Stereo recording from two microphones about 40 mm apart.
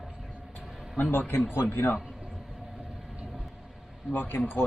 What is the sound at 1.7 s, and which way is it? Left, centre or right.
Speech, left.